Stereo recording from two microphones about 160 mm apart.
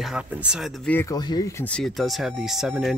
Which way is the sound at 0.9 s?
15° left (ahead or behind).